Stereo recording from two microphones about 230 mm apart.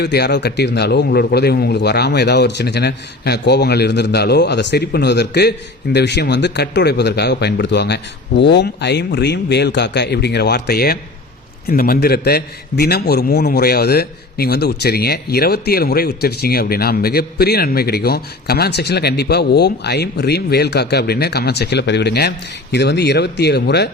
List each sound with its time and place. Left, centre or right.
0.0 s a man's voice: left